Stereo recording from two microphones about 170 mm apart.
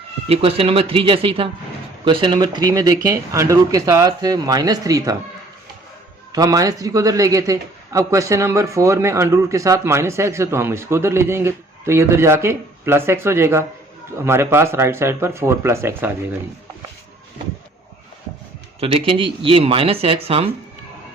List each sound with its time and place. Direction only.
0.3 s speech: 35° right (ahead or behind)
6.3 s a man's voice: 20° right (ahead or behind)
18.8 s speech: 35° right (ahead or behind)